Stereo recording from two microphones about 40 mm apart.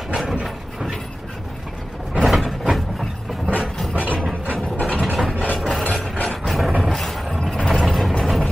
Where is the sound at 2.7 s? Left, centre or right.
Centre.